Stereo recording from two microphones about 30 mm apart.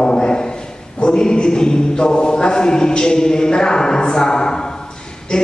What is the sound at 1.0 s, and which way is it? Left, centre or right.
Speech, left.